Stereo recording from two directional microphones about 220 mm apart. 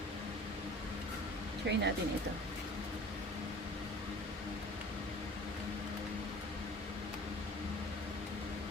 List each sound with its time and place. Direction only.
1.7 s speech: 50° right (ahead or behind)